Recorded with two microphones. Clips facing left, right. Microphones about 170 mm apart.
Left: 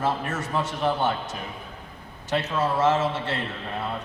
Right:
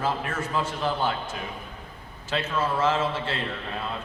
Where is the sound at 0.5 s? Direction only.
20° left (ahead or behind).